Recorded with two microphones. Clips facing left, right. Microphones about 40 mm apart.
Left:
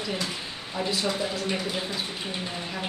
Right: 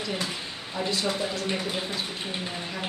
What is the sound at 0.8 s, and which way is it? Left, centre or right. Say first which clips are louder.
Speech: even; centre.